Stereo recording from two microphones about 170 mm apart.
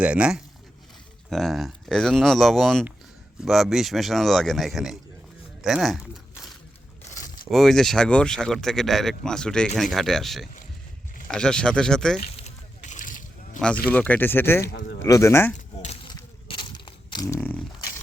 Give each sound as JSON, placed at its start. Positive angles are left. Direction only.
{"t": 0.0, "sound": "speech", "side_deg": -5}
{"t": 12.5, "sound": "a sound", "side_deg": 45}
{"t": 13.8, "sound": "speech", "side_deg": 10}
{"t": 14.7, "sound": "speech", "side_deg": 65}
{"t": 15.0, "sound": "speech", "side_deg": 15}
{"t": 15.5, "sound": "a sound", "side_deg": 40}
{"t": 16.5, "sound": "crushing", "side_deg": 30}